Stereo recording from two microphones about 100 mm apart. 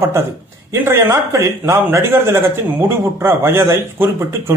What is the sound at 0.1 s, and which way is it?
A man's voice, 25° right (ahead or behind).